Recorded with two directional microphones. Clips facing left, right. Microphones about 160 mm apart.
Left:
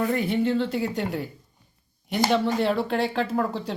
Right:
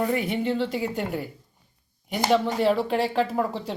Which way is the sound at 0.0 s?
10° right (ahead or behind).